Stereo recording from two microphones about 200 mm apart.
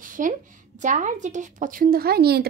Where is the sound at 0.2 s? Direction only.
40° right (ahead or behind).